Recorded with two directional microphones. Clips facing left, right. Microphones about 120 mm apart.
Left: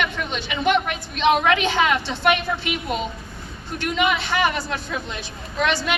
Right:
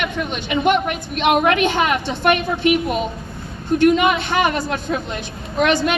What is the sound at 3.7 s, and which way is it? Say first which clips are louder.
A woman's voice: right 8 dB; 50° right (ahead or behind).